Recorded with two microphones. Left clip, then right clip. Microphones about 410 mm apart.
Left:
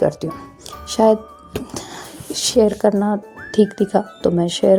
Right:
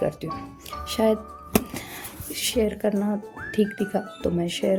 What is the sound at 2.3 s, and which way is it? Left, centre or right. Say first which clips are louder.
Speech: left 9 dB; right.